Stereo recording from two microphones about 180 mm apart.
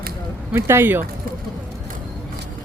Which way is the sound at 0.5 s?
15° right (ahead or behind).